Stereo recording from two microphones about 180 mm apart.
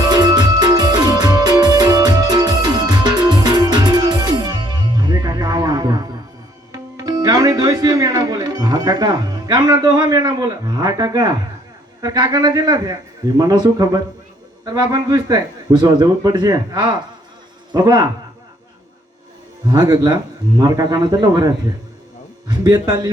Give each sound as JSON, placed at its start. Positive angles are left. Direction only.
{"t": 0.0, "sound": "music", "side_deg": -25}
{"t": 12.0, "sound": "a man's voice", "side_deg": -25}
{"t": 19.6, "sound": "a man's voice", "side_deg": -20}